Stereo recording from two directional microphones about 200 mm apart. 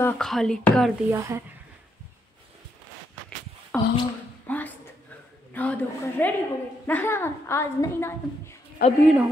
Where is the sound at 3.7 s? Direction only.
5° left (ahead or behind).